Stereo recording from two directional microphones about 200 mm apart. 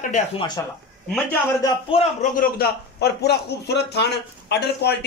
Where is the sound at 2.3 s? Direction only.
50° left (ahead or behind).